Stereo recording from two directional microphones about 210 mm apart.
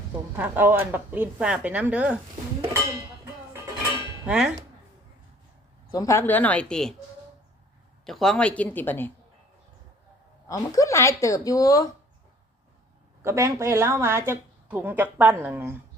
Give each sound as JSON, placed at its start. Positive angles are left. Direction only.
{"t": 0.3, "sound": "a woman's voice", "side_deg": -10}
{"t": 4.3, "sound": "speech", "side_deg": -5}
{"t": 5.9, "sound": "speech", "side_deg": 15}
{"t": 8.0, "sound": "speech", "side_deg": 0}
{"t": 10.5, "sound": "speech", "side_deg": 15}
{"t": 13.2, "sound": "a woman's voice", "side_deg": -15}